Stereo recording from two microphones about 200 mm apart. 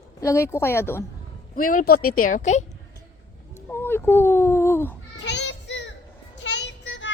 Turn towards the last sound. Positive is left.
turn(degrees=65)  # may be behind; listen again after turning